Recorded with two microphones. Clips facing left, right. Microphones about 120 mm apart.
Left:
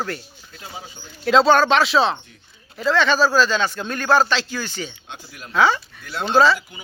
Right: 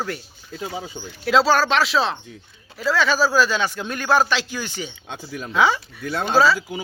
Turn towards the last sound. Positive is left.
turn(degrees=-5)  # may be behind; listen again after turning